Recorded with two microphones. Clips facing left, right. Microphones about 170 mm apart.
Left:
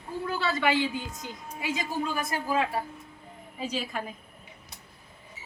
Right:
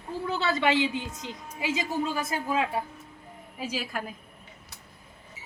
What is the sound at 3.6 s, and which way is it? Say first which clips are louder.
Speech: left 1 dB; 5° right (ahead or behind).